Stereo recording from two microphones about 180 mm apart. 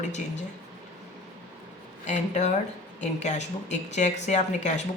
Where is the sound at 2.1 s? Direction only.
40° left (ahead or behind).